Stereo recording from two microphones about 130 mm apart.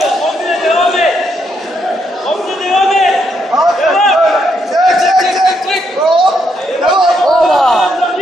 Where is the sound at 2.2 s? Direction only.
Centre (ahead or behind).